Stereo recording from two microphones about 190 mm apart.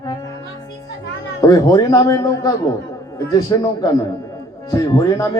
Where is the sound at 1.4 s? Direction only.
20° left (ahead or behind).